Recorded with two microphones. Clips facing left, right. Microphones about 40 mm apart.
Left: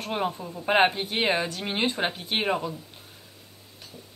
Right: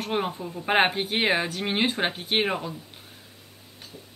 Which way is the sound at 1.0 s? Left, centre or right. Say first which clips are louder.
Right 1 dB; right.